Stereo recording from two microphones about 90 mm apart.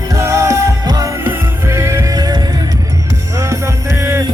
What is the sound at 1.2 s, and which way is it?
Music, 30° right (ahead or behind).